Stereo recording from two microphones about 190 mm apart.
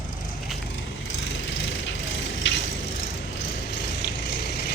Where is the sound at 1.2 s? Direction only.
80° left.